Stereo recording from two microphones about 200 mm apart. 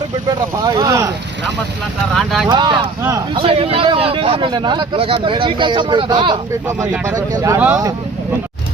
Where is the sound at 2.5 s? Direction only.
20° right (ahead or behind).